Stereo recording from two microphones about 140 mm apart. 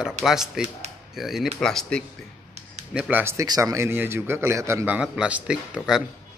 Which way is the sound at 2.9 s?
10° right (ahead or behind).